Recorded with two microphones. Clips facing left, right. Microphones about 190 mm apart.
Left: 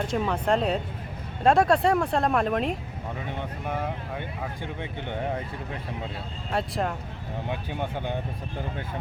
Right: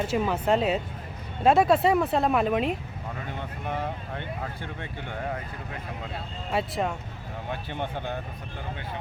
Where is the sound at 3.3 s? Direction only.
15° left (ahead or behind).